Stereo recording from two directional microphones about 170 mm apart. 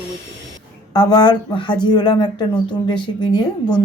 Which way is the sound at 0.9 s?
25° left (ahead or behind).